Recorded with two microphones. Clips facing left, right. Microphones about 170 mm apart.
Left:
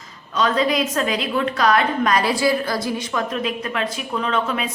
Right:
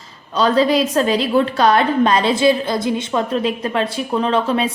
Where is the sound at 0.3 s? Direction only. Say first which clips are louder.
Right 5 dB; 30° right (ahead or behind).